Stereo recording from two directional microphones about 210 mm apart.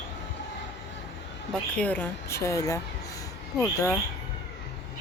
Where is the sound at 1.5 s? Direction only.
5° left (ahead or behind).